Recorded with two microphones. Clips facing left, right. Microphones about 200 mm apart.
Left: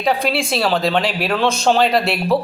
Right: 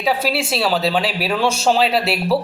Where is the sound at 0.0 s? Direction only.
5° right (ahead or behind).